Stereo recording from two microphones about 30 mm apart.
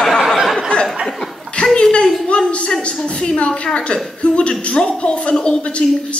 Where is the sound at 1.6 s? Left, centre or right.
Left.